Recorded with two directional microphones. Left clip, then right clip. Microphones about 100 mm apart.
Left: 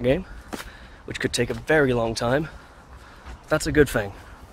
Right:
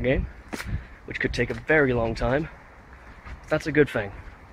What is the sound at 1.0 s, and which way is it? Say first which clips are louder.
Speech: left 1 dB; 35° left (ahead or behind).